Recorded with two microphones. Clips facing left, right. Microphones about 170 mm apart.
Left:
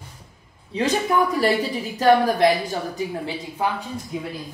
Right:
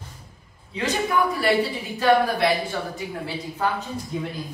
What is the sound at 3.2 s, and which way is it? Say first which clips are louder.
Speech: left 1 dB; 15° left (ahead or behind).